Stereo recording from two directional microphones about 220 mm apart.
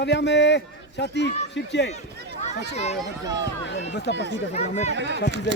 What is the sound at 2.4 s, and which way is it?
Speech, 30° left (ahead or behind).